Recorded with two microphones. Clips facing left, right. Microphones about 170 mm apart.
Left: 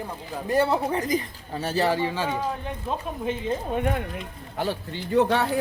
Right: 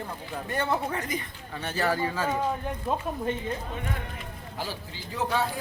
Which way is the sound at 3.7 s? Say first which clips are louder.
Left 9 dB; 55° left (ahead or behind).